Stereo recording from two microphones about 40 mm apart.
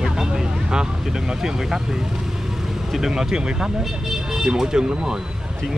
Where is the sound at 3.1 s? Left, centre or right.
Centre.